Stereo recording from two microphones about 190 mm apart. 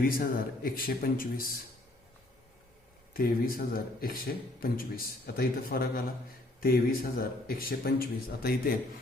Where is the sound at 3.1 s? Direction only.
50° left (ahead or behind).